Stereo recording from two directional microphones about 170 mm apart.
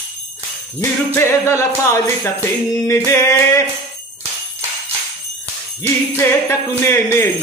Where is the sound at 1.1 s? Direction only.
15° left (ahead or behind).